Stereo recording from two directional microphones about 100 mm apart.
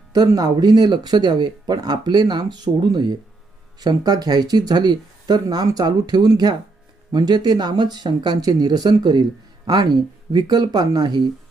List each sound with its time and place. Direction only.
0.1 s speech: 40° right (ahead or behind)